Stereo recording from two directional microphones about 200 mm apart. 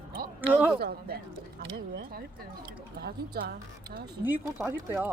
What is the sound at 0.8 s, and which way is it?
Speech, 50° right (ahead or behind).